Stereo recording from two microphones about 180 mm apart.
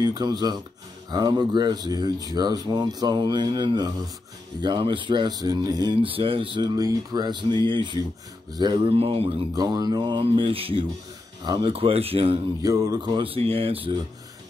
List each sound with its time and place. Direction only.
0.0 s speech: 25° right (ahead or behind)
12.6 s speech: 20° right (ahead or behind)